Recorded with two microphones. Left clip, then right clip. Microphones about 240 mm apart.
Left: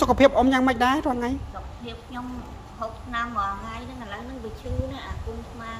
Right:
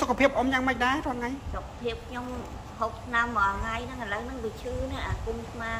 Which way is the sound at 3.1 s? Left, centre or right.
Centre.